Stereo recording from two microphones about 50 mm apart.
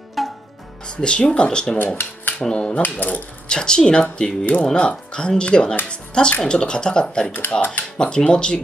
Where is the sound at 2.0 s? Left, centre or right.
Left.